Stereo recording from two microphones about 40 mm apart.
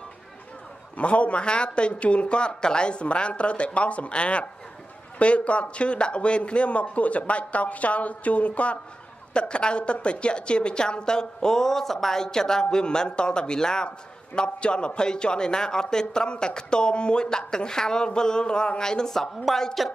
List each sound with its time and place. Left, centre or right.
0.9 s a woman's voice: left; by 19.9 s centre